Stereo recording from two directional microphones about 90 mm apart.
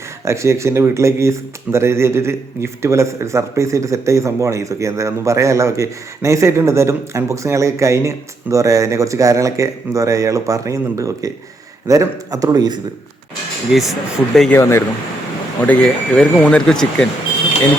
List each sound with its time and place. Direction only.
0.3 s speech: 35° right (ahead or behind); by 12.8 s 50° right (ahead or behind)
13.7 s speech: 5° right (ahead or behind)
14.5 s speech: 30° left (ahead or behind)
15.6 s speech: 15° left (ahead or behind)